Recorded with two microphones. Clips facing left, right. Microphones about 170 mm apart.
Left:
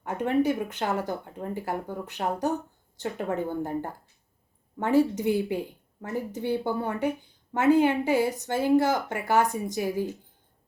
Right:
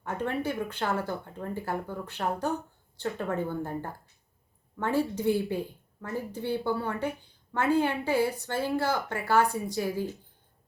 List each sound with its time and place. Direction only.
0.0 s a woman's voice: 15° left (ahead or behind)